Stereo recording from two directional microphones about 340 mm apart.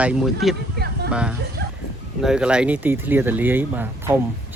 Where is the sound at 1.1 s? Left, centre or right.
Centre.